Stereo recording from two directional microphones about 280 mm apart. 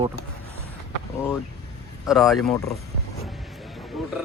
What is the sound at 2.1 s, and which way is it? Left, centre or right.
Speech, centre.